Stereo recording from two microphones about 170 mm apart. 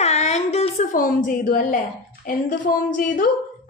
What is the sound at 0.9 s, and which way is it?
A woman's voice, 50° left (ahead or behind).